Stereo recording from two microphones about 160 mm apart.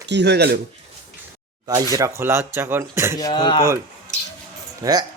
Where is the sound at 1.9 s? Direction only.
20° right (ahead or behind).